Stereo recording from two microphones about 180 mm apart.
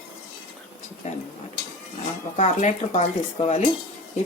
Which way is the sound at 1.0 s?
40° left (ahead or behind).